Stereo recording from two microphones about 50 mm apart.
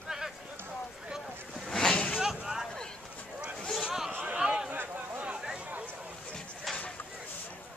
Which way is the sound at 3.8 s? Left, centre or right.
Centre.